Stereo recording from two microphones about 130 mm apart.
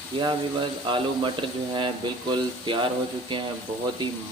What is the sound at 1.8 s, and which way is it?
Speech, 40° right (ahead or behind).